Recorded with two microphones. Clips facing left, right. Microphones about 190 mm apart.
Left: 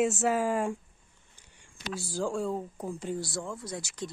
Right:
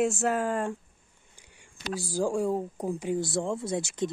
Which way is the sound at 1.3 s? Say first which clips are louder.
Right 4 dB; 10° right (ahead or behind).